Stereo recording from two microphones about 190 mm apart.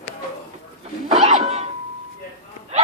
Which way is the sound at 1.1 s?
30° right (ahead or behind).